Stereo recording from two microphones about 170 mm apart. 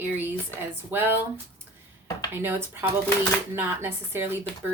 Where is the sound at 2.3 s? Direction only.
15° right (ahead or behind).